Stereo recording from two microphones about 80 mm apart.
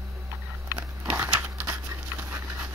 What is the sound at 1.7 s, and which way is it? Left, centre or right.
Patter, right.